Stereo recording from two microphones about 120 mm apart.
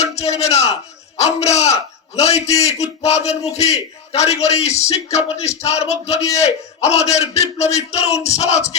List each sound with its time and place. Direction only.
0.0 s speech: 65° left (ahead or behind)